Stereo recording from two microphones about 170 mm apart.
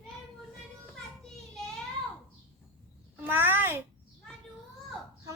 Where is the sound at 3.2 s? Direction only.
10° right (ahead or behind).